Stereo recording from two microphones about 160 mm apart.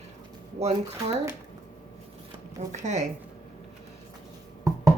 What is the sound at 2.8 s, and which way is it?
Speech, 45° right (ahead or behind).